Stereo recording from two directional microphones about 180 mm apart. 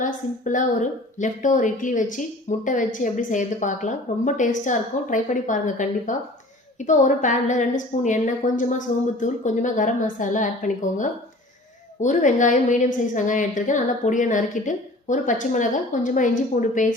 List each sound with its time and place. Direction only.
0.0 s a woman's voice: 45° left (ahead or behind)